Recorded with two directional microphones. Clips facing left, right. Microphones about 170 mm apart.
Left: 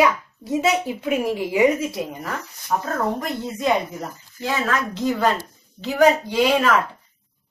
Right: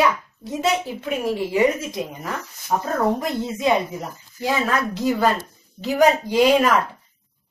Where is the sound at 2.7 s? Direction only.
15° right (ahead or behind).